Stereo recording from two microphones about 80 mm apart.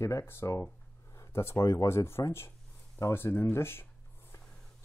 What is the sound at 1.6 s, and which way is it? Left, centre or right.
Speech, left.